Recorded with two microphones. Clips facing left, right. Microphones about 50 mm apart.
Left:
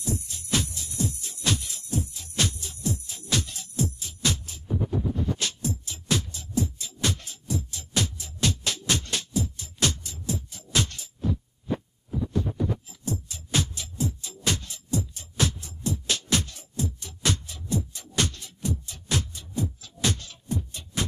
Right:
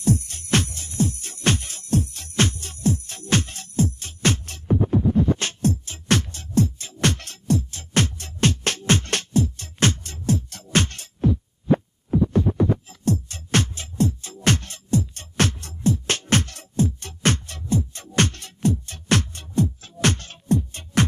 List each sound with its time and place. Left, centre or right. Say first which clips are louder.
0.0 s music: right 10 dB; right
2.4 s jingle bell: right 7 dB; right
4.8 s music: right 9 dB; right
7.7 s music: right 6 dB; right
15.8 s music: right 7 dB; right